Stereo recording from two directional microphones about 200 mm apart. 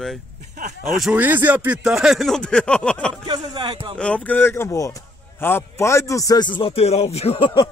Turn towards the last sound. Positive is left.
turn(degrees=25)  # may be behind; listen again after turning